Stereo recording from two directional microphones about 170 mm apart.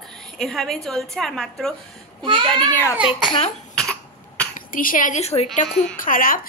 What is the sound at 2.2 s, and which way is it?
Speech, 30° right (ahead or behind).